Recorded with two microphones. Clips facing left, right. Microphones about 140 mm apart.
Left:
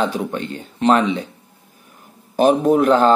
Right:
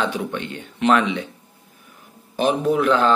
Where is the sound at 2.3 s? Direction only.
45° left (ahead or behind).